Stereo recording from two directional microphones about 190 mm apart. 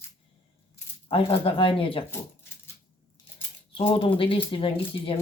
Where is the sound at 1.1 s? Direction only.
30° left (ahead or behind).